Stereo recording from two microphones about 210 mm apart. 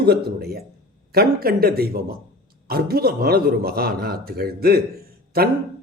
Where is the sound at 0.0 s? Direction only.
50° right (ahead or behind).